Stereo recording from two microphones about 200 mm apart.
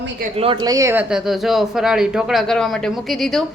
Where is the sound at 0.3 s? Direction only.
25° right (ahead or behind).